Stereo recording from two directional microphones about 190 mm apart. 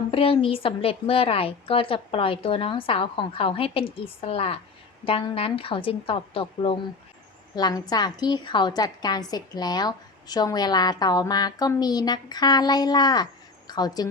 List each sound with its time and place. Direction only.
0.1 s a woman's voice: 30° left (ahead or behind)